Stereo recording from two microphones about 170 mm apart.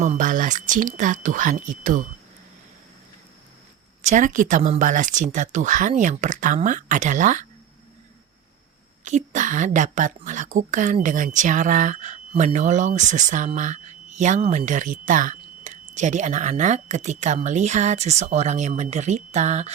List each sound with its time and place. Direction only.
0.0 s speech: 50° right (ahead or behind)
4.0 s speech: 45° right (ahead or behind)
9.0 s speech: 45° right (ahead or behind)